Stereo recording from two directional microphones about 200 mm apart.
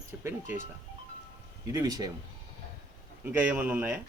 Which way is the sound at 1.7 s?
20° right (ahead or behind).